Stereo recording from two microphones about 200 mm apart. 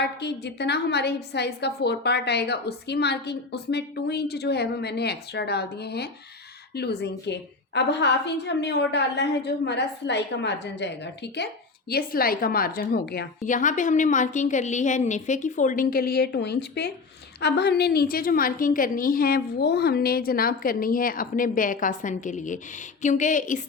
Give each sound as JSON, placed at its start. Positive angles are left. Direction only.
{"t": 0.0, "sound": "a woman's voice", "side_deg": 55}
{"t": 11.9, "sound": "a woman's voice", "side_deg": 50}